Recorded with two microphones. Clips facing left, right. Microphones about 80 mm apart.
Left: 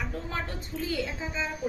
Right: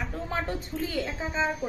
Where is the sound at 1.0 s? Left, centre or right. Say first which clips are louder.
Right 3 dB; right.